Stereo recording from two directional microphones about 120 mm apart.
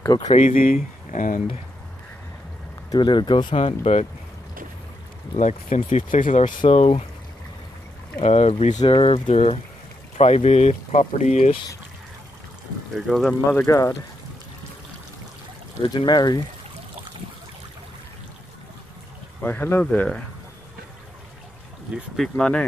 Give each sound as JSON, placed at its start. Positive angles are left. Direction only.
{"t": 0.0, "sound": "speech", "side_deg": 35}
{"t": 0.3, "sound": "speech", "side_deg": 90}
{"t": 2.9, "sound": "speech", "side_deg": 40}
{"t": 3.6, "sound": "speech", "side_deg": 65}
{"t": 5.3, "sound": "speech", "side_deg": 70}
{"t": 6.6, "sound": "speech", "side_deg": 55}
{"t": 8.2, "sound": "speech", "side_deg": 70}
{"t": 8.8, "sound": "speech", "side_deg": 50}
{"t": 12.9, "sound": "speech", "side_deg": 0}
{"t": 13.7, "sound": "speech", "side_deg": 25}
{"t": 15.8, "sound": "speech", "side_deg": 45}
{"t": 19.4, "sound": "speech", "side_deg": 20}
{"t": 21.9, "sound": "speech", "side_deg": 0}
{"t": 22.3, "sound": "speech", "side_deg": 10}